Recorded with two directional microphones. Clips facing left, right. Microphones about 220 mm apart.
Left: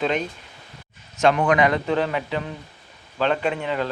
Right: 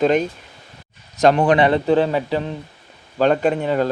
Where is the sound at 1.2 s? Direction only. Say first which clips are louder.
Right 4 dB; 35° right (ahead or behind).